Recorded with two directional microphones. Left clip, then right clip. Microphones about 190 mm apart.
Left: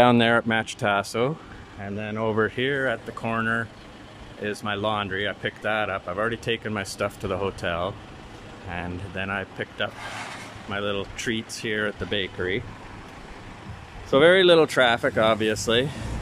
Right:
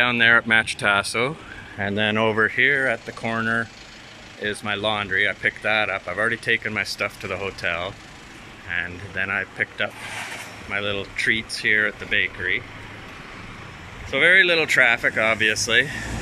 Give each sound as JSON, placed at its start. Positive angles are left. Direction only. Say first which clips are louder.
{"t": 0.0, "sound": "speech", "louder": "even", "side_deg": 25}
{"t": 0.3, "sound": "speech", "louder": "right 5 dB", "side_deg": 5}
{"t": 1.8, "sound": "speech", "louder": "right 10 dB", "side_deg": -15}
{"t": 2.2, "sound": "speech", "louder": "right 1 dB", "side_deg": 0}
{"t": 2.5, "sound": "speech", "louder": "right 6 dB", "side_deg": 10}
{"t": 12.1, "sound": "speech", "louder": "right 5 dB", "side_deg": 25}
{"t": 14.1, "sound": "speech", "louder": "even", "side_deg": 25}